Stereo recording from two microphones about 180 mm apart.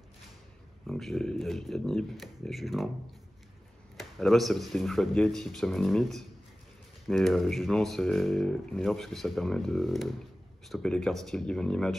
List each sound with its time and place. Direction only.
0.8 s speech: centre (ahead or behind)
3.9 s speech: centre (ahead or behind)